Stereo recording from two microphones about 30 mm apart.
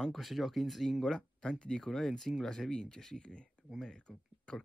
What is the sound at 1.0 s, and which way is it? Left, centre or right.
Speech, left.